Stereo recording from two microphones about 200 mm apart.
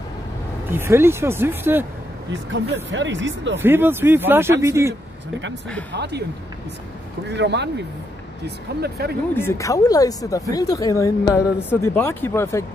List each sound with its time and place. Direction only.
0.7 s speech: 10° right (ahead or behind)
2.5 s speech: 65° right (ahead or behind)
3.5 s speech: 10° right (ahead or behind)
5.9 s speech: 60° right (ahead or behind)
7.2 s speech: 60° right (ahead or behind)
8.8 s speech: 55° right (ahead or behind)
9.3 s speech: 10° left (ahead or behind)